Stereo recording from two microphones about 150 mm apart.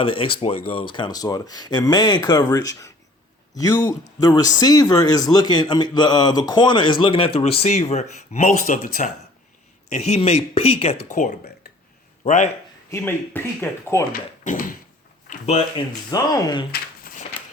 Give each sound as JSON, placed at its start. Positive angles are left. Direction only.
{"t": 0.0, "sound": "a man's voice", "side_deg": 35}
{"t": 9.9, "sound": "speech", "side_deg": 45}
{"t": 12.9, "sound": "speech", "side_deg": 15}
{"t": 14.1, "sound": "speech", "side_deg": 65}
{"t": 15.3, "sound": "speech", "side_deg": 45}
{"t": 16.0, "sound": "a man's voice", "side_deg": 25}
{"t": 16.7, "sound": "a sound", "side_deg": 70}